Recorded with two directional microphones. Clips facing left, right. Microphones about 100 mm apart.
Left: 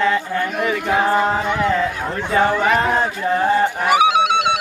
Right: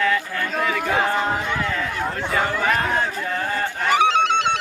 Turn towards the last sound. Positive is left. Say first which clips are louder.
# left 3 dB
turn(degrees=10)  # may be behind; listen again after turning